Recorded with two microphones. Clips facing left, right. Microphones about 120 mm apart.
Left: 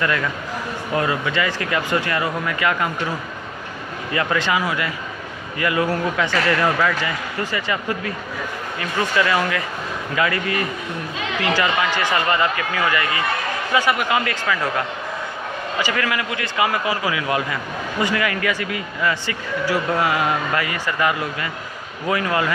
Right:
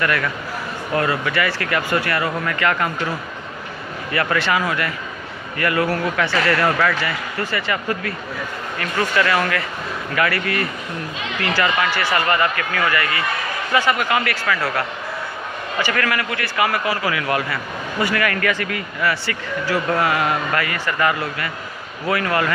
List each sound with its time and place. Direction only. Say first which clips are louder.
0.0 s speech: right 1 dB; 20° left (ahead or behind)